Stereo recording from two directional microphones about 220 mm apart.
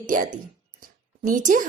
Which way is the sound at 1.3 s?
35° right (ahead or behind).